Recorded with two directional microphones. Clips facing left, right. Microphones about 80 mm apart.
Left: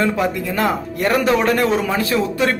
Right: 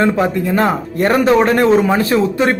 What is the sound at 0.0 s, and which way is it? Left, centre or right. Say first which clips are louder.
A man's voice: right 4 dB; right.